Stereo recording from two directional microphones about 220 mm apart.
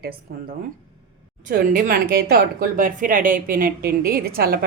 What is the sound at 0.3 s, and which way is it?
Speech, 45° right (ahead or behind).